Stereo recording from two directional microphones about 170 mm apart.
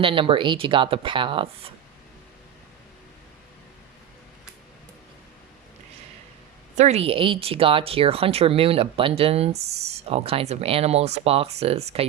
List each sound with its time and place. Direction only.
0.0 s speech: 30° right (ahead or behind)
6.7 s speech: 40° right (ahead or behind)